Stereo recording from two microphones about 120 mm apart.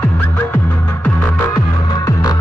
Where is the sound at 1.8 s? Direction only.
30° left (ahead or behind).